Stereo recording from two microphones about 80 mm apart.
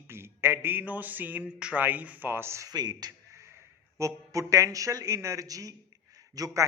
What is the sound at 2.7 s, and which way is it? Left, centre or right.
Speech, right.